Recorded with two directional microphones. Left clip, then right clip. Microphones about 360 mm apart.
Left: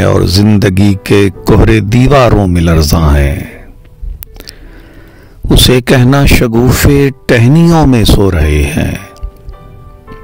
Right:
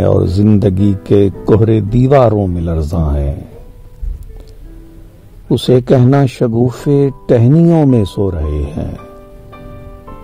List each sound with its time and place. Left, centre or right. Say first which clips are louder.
0.2 s speech: left 3 dB; left
5.5 s speech: left 4 dB; left
5.9 s speech: left 2 dB; left
6.2 s speech: left 5 dB; left